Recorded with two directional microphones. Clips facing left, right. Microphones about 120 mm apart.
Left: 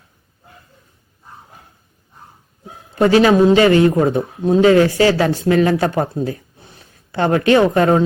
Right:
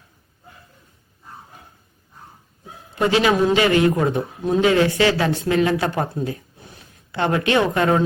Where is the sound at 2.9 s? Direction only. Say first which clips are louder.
Left 6 dB; 40° left (ahead or behind).